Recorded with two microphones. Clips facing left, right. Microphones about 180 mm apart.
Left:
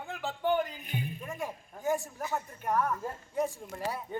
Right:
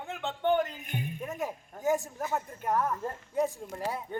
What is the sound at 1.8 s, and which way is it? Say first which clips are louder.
A man's voice: right 3 dB; 20° right (ahead or behind).